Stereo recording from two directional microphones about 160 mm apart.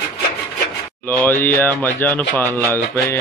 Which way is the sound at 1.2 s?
10° left (ahead or behind).